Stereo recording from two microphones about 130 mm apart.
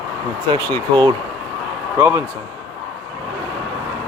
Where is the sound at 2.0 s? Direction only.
15° right (ahead or behind).